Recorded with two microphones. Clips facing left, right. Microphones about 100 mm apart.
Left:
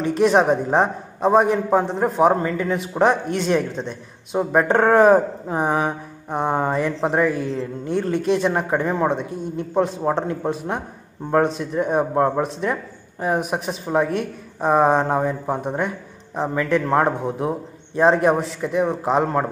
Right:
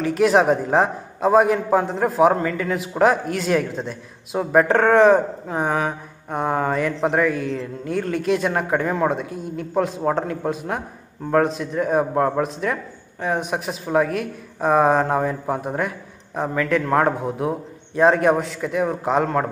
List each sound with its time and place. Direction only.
0.0 s speech: centre (ahead or behind)